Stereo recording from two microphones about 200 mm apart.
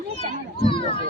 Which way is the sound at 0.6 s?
25° left (ahead or behind).